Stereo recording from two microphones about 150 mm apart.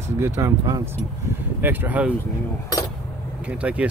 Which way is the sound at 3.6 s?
10° right (ahead or behind).